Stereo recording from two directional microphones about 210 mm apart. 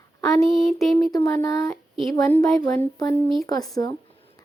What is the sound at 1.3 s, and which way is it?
Speech, 15° left (ahead or behind).